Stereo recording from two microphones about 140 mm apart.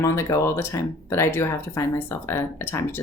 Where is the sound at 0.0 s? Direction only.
20° left (ahead or behind).